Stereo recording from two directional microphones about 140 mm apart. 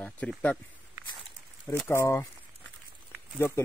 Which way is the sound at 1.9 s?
20° left (ahead or behind).